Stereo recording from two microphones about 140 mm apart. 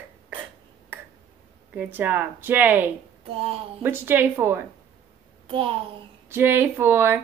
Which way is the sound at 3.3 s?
45° right (ahead or behind).